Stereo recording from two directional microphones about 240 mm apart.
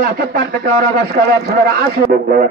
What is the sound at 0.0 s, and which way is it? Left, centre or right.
A man's voice, right.